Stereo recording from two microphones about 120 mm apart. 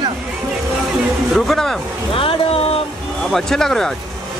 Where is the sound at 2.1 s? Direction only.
50° left (ahead or behind).